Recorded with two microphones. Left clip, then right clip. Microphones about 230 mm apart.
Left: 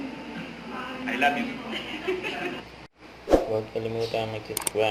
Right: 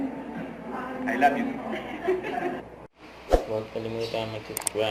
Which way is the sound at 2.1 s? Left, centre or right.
Centre.